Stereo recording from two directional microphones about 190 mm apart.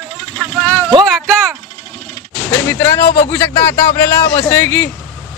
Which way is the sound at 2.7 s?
15° left (ahead or behind).